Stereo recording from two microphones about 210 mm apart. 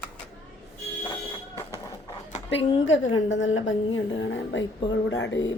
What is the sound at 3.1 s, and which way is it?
A woman's voice, 65° left (ahead or behind).